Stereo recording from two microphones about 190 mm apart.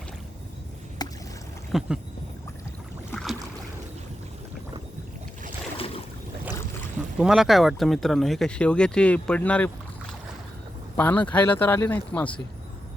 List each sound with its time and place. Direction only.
1.0 s rowboat: 20° left (ahead or behind)
1.7 s speech: centre (ahead or behind)
3.1 s boat: 5° left (ahead or behind)
5.7 s boat: 30° left (ahead or behind)
7.2 s speech: centre (ahead or behind)
10.9 s speech: 10° left (ahead or behind)